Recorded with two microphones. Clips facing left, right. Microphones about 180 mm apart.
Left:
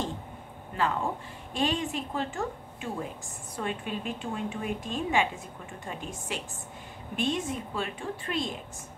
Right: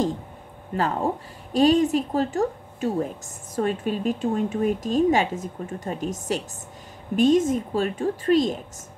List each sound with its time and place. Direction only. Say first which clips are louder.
0.7 s speech: right 5 dB; 40° right (ahead or behind)